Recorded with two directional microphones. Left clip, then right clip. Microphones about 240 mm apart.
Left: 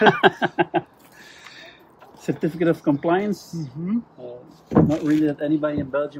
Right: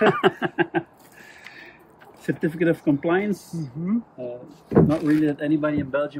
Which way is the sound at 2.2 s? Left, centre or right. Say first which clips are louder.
Left 1 dB; left.